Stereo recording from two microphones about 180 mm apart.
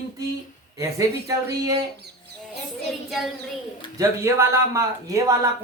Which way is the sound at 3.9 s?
15° right (ahead or behind).